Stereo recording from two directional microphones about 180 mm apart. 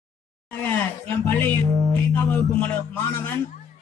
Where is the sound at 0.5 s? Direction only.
10° left (ahead or behind).